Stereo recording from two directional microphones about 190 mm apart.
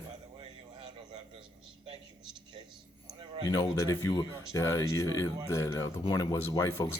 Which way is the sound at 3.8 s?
15° left (ahead or behind).